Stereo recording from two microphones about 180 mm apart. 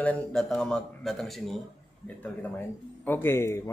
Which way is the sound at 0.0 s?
5° left (ahead or behind).